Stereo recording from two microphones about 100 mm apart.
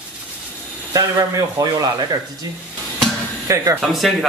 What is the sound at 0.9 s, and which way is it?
Speech, 35° right (ahead or behind).